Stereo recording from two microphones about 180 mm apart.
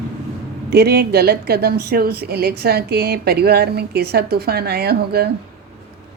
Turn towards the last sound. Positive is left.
turn(degrees=-60)  # may be behind; listen again after turning